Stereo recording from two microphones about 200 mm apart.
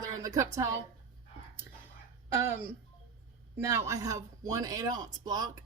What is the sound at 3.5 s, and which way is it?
A woman's voice, 15° right (ahead or behind).